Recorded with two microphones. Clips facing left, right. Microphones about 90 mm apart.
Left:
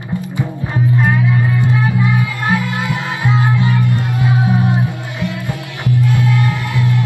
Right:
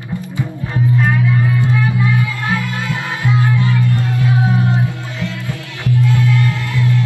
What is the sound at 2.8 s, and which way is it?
Music, 20° left (ahead or behind).